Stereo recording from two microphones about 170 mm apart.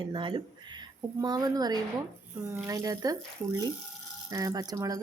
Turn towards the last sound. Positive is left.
turn(degrees=-20)  # may be behind; listen again after turning